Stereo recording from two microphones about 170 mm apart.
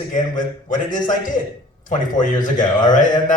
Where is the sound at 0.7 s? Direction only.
50° left (ahead or behind).